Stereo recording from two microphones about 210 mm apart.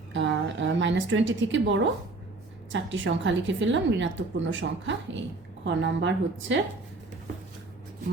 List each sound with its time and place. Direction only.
0.1 s a woman's voice: 60° right (ahead or behind)